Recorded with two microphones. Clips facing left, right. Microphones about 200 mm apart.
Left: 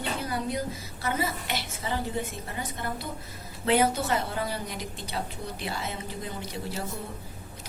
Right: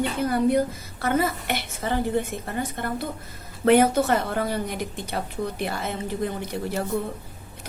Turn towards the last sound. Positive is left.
turn(degrees=-55)  # may be behind; listen again after turning